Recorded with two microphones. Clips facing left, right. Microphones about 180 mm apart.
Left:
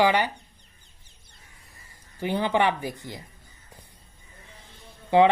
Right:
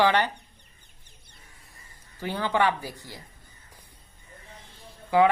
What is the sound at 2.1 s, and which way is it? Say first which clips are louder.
Speech: left 2 dB; 15° left (ahead or behind).